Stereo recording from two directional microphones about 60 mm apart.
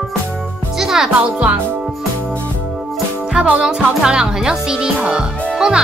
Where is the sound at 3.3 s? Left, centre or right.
Centre.